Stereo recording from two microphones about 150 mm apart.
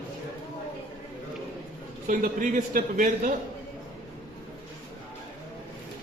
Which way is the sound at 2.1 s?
60° right (ahead or behind).